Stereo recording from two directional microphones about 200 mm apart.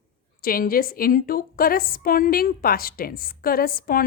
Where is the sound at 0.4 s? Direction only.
45° left (ahead or behind).